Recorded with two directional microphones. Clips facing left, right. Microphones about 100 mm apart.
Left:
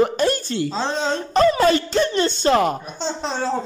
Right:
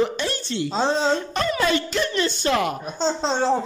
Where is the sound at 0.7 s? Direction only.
20° right (ahead or behind).